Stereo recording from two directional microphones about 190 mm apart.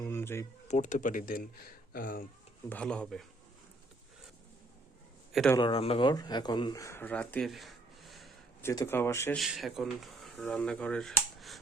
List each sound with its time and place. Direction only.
0.0 s a sound: 10° left (ahead or behind)
0.7 s speech: 40° left (ahead or behind)
2.6 s speech: 5° left (ahead or behind)
5.3 s a man's voice: centre (ahead or behind)
5.5 s speech: 30° left (ahead or behind); by 8.3 s centre (ahead or behind)
8.6 s speech: 15° left (ahead or behind)
9.4 s speech: centre (ahead or behind)